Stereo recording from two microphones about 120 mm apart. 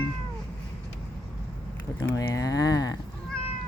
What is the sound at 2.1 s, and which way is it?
Speech, 30° left (ahead or behind).